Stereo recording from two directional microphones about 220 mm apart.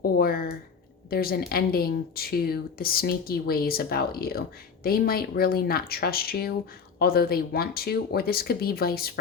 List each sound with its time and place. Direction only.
0.0 s a woman's voice: 45° left (ahead or behind)